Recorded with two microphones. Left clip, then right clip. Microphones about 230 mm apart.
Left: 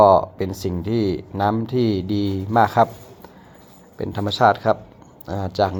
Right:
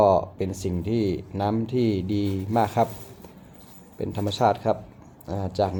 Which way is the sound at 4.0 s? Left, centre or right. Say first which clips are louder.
Left 6 dB; centre.